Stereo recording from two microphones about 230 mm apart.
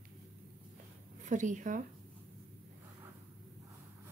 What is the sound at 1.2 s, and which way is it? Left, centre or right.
Speech, right.